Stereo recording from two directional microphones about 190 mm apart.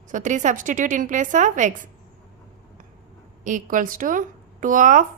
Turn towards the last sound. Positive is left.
turn(degrees=-45)  # may be behind; listen again after turning